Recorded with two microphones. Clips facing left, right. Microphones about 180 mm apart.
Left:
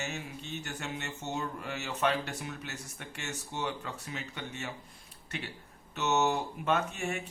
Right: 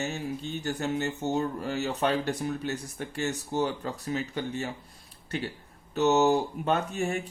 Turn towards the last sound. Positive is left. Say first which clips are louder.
# right 4 dB
turn(degrees=-35)  # may be behind; listen again after turning